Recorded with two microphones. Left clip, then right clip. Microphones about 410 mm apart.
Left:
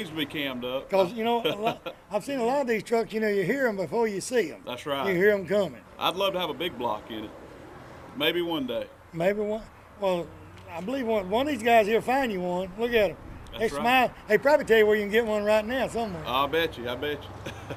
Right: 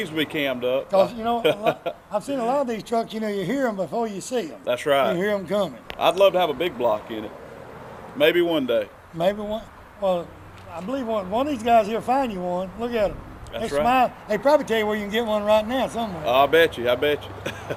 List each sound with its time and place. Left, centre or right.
0.0 s speech: right
0.9 s speech: left
1.4 s speech: centre
2.3 s speech: left
4.1 s speech: left
4.6 s speech: right
5.1 s speech: left
6.0 s speech: centre
9.1 s speech: left
16.2 s speech: right